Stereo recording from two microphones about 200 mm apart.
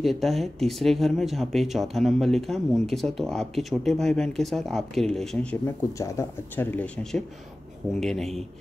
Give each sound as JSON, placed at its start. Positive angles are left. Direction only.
{"t": 0.0, "sound": "speech", "side_deg": 0}